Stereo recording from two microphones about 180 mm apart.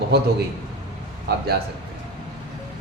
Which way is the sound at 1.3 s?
65° right (ahead or behind).